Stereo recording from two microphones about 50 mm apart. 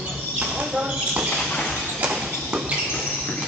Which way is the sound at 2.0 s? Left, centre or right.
Right.